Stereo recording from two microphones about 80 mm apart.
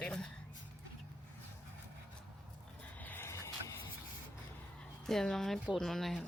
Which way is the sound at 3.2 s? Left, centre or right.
Left.